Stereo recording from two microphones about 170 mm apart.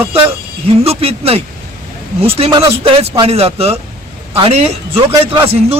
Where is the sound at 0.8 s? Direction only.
35° right (ahead or behind).